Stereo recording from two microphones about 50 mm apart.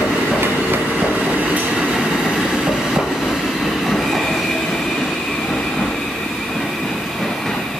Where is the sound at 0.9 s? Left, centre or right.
Right.